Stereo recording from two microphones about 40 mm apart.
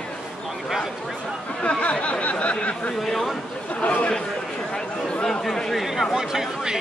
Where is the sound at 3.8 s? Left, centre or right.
Left.